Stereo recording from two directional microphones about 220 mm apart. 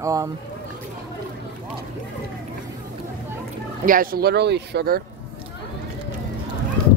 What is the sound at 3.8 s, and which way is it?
Speech, 40° right (ahead or behind).